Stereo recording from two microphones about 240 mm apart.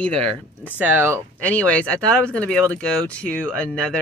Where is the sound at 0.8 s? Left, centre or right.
Centre.